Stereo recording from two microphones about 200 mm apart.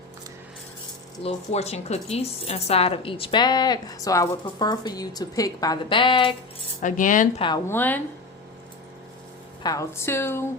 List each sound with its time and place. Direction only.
1.2 s speech: 35° left (ahead or behind)
6.8 s speech: 40° left (ahead or behind)
7.7 s a woman's voice: 10° left (ahead or behind)
9.6 s a woman's voice: 15° left (ahead or behind)